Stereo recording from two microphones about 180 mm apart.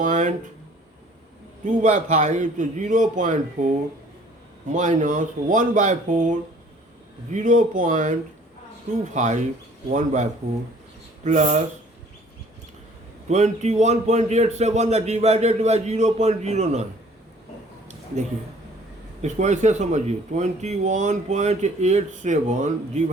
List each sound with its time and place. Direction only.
0.0 s speech: 45° right (ahead or behind)
1.8 s speech: 40° right (ahead or behind)
13.2 s speech: 40° right (ahead or behind)
19.2 s speech: 40° right (ahead or behind)